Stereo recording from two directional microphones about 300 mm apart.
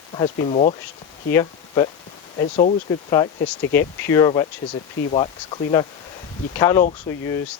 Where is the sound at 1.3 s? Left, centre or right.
Centre.